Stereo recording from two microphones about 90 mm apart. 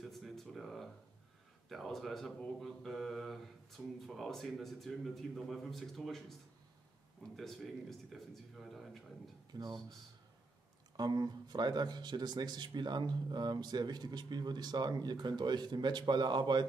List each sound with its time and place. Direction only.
0.0 s a sound: centre (ahead or behind)
1.7 s speech: centre (ahead or behind)
7.3 s speech: centre (ahead or behind)
9.5 s speech: 50° right (ahead or behind)
11.0 s speech: 50° right (ahead or behind)